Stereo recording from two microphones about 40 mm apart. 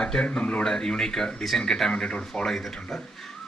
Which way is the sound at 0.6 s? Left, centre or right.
Centre.